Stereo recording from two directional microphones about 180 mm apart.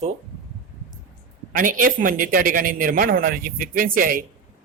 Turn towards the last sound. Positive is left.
turn(degrees=-50)  # may be behind; listen again after turning